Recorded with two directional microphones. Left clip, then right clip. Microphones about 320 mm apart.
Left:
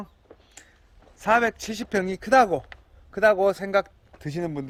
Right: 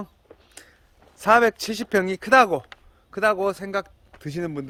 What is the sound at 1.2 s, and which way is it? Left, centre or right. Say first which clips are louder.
A man's voice: right 4 dB; centre.